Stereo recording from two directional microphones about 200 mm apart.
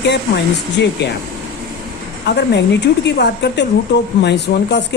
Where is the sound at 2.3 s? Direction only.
55° left (ahead or behind).